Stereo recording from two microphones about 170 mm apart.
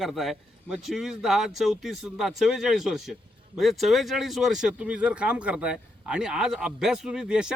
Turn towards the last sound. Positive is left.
turn(degrees=-5)  # may be behind; listen again after turning